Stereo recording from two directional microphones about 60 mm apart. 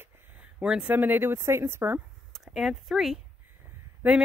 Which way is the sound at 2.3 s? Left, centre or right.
Centre.